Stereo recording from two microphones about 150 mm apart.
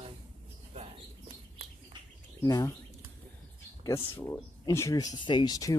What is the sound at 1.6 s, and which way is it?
Bird, 45° right (ahead or behind).